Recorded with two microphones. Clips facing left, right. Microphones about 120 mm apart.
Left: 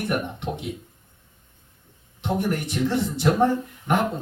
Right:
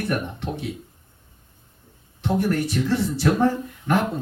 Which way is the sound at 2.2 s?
20° left (ahead or behind).